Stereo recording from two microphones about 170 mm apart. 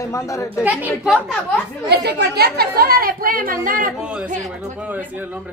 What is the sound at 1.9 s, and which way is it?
Speech, 75° right (ahead or behind).